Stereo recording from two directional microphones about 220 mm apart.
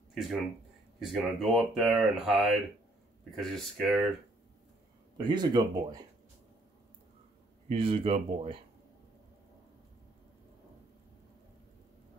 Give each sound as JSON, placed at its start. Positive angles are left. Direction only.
{"t": 0.1, "sound": "speech", "side_deg": 0}
{"t": 5.1, "sound": "speech", "side_deg": -20}
{"t": 7.6, "sound": "speech", "side_deg": -25}